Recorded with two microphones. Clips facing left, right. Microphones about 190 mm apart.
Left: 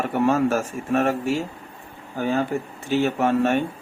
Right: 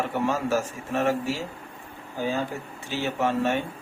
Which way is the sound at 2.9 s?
55° left (ahead or behind).